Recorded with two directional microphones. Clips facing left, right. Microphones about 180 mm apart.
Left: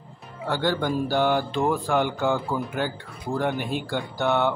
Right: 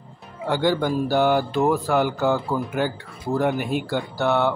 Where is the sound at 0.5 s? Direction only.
10° right (ahead or behind).